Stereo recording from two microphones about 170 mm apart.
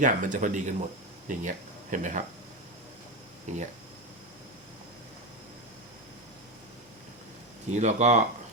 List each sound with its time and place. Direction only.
0.0 s speech: 50° right (ahead or behind)
3.4 s speech: 45° right (ahead or behind)
7.7 s speech: 45° right (ahead or behind)